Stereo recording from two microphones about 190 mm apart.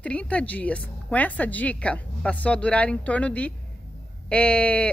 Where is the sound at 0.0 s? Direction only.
5° left (ahead or behind).